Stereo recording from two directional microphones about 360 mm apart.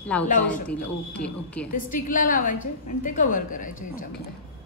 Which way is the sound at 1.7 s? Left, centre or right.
Left.